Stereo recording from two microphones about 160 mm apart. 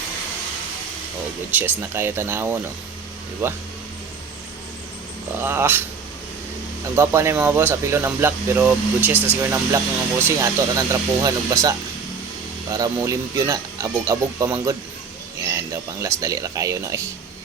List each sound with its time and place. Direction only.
1.5 s speech: 10° right (ahead or behind)
5.3 s speech: 15° right (ahead or behind)
6.9 s speech: 15° right (ahead or behind)
12.7 s speech: 25° right (ahead or behind)